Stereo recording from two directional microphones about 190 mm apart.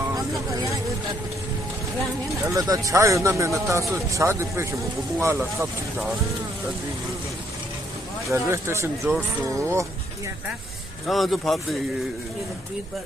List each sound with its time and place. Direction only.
0.1 s vehicle: 20° right (ahead or behind)
2.5 s speech: 20° right (ahead or behind)
8.3 s speech: 15° right (ahead or behind)
11.0 s speech: centre (ahead or behind)